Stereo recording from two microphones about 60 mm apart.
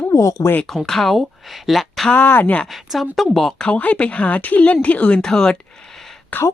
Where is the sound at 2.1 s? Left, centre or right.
Left.